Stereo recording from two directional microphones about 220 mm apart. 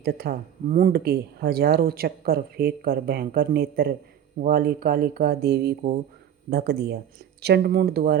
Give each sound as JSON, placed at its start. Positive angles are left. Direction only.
{"t": 0.0, "sound": "speech", "side_deg": -45}